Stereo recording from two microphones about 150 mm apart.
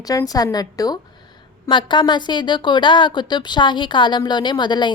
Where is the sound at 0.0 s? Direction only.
25° left (ahead or behind).